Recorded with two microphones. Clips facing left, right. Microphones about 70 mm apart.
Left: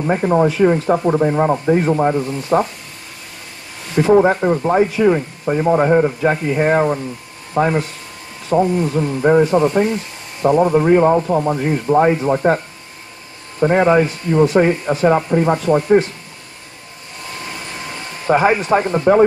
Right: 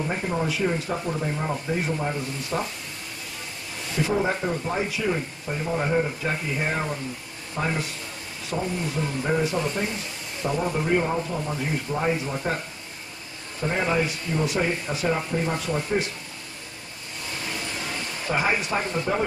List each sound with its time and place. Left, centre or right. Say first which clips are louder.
0.0 s speech: left 12 dB; left
3.9 s speech: left 12 dB; left
13.6 s speech: left 12 dB; left
15.0 s speech: left 11 dB; left
18.2 s speech: left 11 dB; left